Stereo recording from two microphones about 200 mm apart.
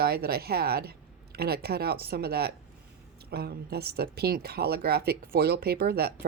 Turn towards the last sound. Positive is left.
turn(degrees=-50)  # may be behind; listen again after turning